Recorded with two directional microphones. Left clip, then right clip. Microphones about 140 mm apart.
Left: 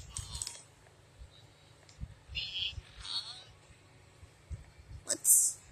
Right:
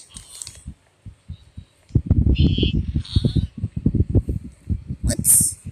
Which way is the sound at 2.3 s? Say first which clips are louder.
Right 11 dB; 20° left (ahead or behind).